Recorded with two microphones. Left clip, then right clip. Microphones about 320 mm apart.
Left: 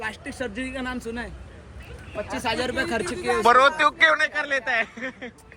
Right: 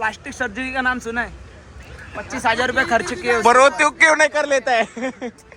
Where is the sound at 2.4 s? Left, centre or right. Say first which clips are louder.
Right 9 dB; centre.